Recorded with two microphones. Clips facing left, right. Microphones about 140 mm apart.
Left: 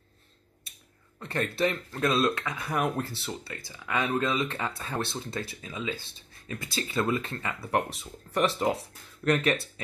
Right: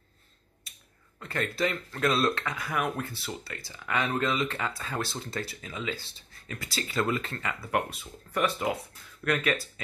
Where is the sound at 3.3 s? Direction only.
20° left (ahead or behind).